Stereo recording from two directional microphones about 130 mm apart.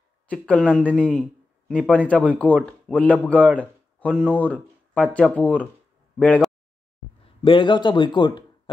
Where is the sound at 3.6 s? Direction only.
10° left (ahead or behind).